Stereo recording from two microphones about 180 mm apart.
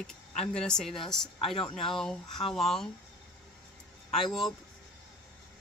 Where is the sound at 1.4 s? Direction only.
30° left (ahead or behind).